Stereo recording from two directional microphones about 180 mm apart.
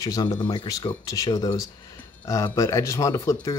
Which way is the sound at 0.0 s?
20° left (ahead or behind).